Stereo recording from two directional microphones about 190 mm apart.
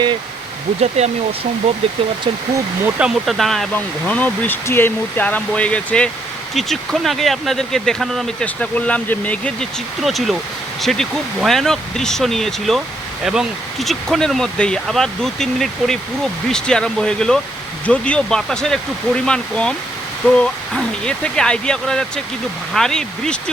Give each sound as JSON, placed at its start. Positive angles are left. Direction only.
{"t": 0.8, "sound": "speech", "side_deg": -35}
{"t": 2.8, "sound": "speech", "side_deg": -5}